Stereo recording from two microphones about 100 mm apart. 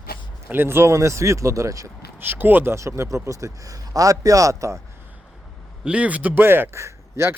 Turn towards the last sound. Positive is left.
turn(degrees=-25)  # may be behind; listen again after turning